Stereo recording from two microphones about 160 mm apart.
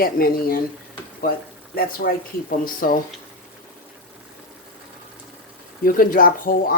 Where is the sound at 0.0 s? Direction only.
65° left (ahead or behind).